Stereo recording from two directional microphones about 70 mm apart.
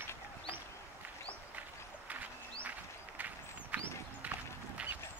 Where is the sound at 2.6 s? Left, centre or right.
Right.